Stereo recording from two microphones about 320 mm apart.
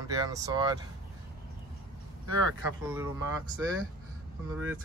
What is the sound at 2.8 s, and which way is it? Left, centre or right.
Speech, centre.